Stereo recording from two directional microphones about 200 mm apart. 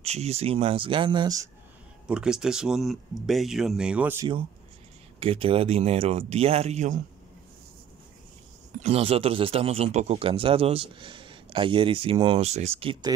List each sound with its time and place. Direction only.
0.0 s speech: 30° right (ahead or behind)
2.0 s speech: 5° right (ahead or behind)
5.2 s speech: 30° right (ahead or behind)
8.7 s speech: 30° right (ahead or behind)